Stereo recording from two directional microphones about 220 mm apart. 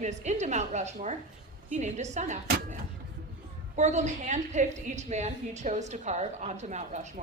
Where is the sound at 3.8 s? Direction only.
30° right (ahead or behind).